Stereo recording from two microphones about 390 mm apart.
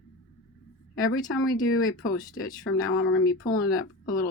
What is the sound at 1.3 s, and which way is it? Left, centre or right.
Speech, left.